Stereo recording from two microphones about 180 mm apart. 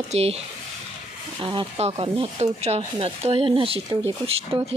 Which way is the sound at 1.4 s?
30° right (ahead or behind).